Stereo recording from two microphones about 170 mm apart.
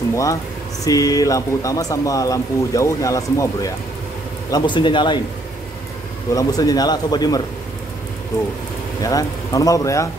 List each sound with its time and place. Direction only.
0.1 s speech: 20° left (ahead or behind)
6.3 s speech: 20° left (ahead or behind)
9.0 s speech: 20° left (ahead or behind)